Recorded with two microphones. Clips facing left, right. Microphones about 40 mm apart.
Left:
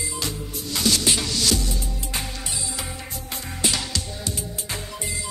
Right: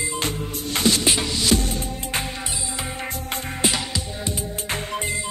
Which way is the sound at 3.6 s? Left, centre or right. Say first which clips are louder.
Right 1 dB; centre.